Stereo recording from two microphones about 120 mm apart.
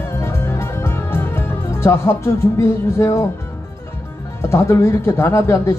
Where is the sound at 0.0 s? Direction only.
20° left (ahead or behind).